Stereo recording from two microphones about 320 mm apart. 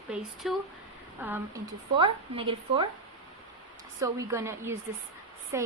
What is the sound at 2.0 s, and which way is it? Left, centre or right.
Speech, centre.